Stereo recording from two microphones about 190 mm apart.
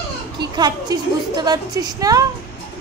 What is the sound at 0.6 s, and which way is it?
A woman's voice, 20° right (ahead or behind).